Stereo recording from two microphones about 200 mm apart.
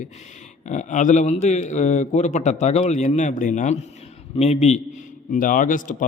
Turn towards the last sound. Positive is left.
turn(degrees=40)  # may be behind; listen again after turning